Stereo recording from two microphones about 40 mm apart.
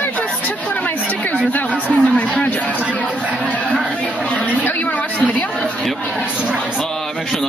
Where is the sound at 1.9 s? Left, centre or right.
Left.